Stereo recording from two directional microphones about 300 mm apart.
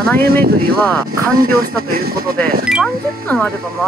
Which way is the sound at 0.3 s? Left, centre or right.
Right.